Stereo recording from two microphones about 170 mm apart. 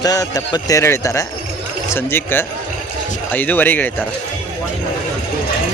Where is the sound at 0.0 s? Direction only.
20° left (ahead or behind).